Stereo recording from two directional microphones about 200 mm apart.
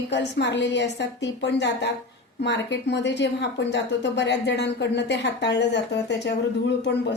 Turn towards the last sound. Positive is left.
turn(degrees=60)  # may be behind; listen again after turning